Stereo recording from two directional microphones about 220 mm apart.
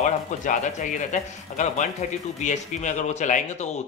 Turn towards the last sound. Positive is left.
turn(degrees=35)  # may be behind; listen again after turning